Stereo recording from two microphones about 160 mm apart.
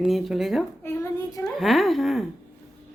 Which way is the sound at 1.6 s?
Centre (ahead or behind).